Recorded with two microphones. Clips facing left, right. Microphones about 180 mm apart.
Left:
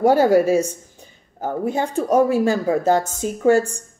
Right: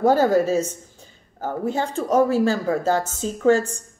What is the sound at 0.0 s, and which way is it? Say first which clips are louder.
Speech: left 3 dB; 15° left (ahead or behind).